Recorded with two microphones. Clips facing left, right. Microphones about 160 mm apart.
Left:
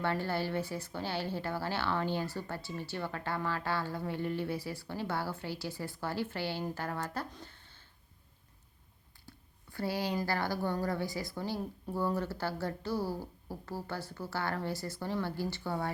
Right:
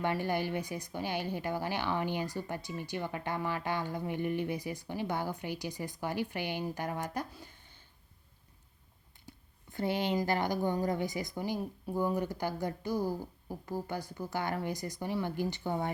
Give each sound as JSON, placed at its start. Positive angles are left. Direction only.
{"t": 0.0, "sound": "speech", "side_deg": -15}
{"t": 9.2, "sound": "speech", "side_deg": -20}